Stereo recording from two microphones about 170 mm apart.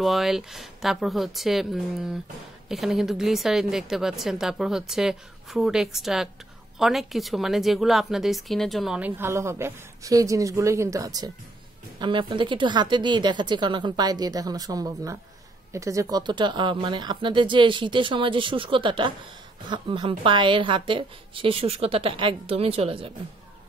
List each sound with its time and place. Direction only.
0.0 s a woman's voice: centre (ahead or behind); by 23.1 s 35° right (ahead or behind)